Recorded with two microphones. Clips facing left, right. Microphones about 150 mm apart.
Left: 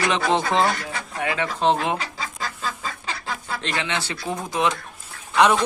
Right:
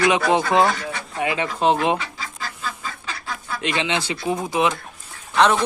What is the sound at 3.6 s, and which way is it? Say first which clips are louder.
Speech: right 6 dB; 15° right (ahead or behind).